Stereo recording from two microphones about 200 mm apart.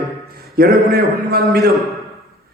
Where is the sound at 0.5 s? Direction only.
50° right (ahead or behind).